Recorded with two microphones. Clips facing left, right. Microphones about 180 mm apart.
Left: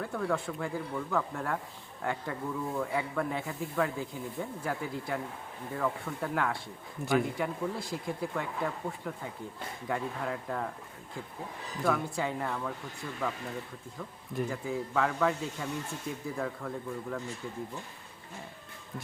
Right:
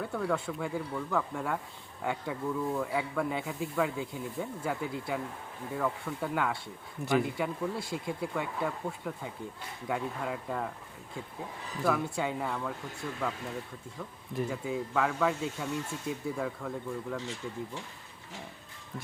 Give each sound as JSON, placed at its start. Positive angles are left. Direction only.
{"t": 0.0, "sound": "speech", "side_deg": -5}
{"t": 11.8, "sound": "speech", "side_deg": 0}
{"t": 14.3, "sound": "speech", "side_deg": -5}
{"t": 17.2, "sound": "speech", "side_deg": -90}